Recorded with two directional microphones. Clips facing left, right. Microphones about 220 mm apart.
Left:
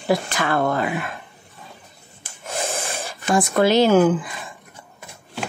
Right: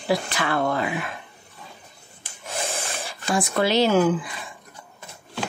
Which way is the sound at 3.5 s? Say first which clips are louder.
Left 4 dB; 50° left (ahead or behind).